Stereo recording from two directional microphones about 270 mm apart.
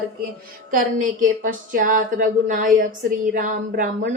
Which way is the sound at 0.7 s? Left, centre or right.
Right.